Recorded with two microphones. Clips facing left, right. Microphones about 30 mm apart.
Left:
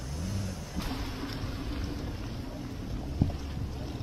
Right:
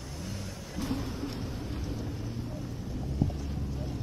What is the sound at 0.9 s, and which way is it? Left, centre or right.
Vehicle, left.